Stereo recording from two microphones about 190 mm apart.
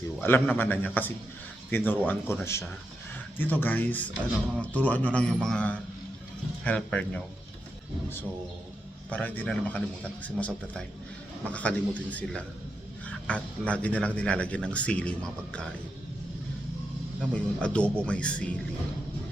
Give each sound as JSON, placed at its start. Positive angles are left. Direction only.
{"t": 0.2, "sound": "speech", "side_deg": 10}
{"t": 9.0, "sound": "speech", "side_deg": 5}
{"t": 17.2, "sound": "speech", "side_deg": 5}